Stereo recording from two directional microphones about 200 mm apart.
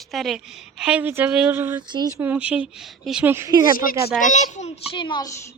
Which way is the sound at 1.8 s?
20° right (ahead or behind).